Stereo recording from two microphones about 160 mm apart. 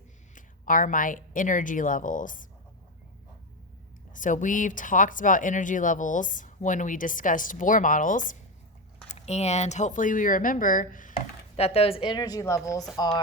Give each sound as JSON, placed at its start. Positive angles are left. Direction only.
{"t": 0.3, "sound": "speech", "side_deg": 55}
{"t": 4.1, "sound": "speech", "side_deg": 55}
{"t": 9.0, "sound": "speech", "side_deg": 45}
{"t": 11.5, "sound": "a woman's voice", "side_deg": 40}